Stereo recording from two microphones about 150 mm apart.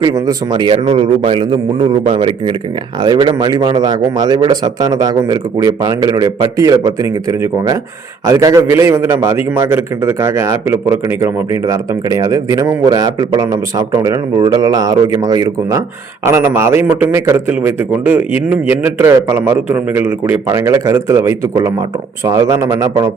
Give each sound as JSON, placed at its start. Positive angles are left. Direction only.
{"t": 0.0, "sound": "a man's voice", "side_deg": -25}